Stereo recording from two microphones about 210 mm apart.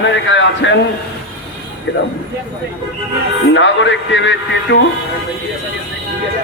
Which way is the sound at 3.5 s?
60° left (ahead or behind).